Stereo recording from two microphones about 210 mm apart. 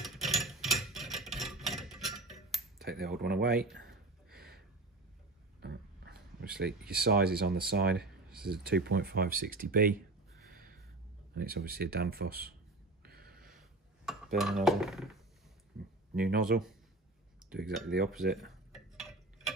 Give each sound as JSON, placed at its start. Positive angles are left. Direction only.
{"t": 0.0, "sound": "a sound", "side_deg": 0}
{"t": 2.8, "sound": "speech", "side_deg": -45}
{"t": 4.3, "sound": "a sound", "side_deg": -45}
{"t": 7.7, "sound": "speech", "side_deg": -50}
{"t": 11.3, "sound": "speech", "side_deg": -45}
{"t": 13.0, "sound": "a sound", "side_deg": -45}
{"t": 13.5, "sound": "dishes", "side_deg": 0}
{"t": 16.2, "sound": "speech", "side_deg": -45}
{"t": 18.3, "sound": "tick-tock", "side_deg": 0}